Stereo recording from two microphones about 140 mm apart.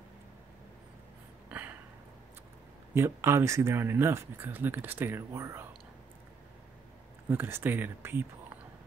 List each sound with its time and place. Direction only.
1.5 s a sound: 10° right (ahead or behind)
2.9 s speech: 20° right (ahead or behind)
7.2 s speech: 15° right (ahead or behind)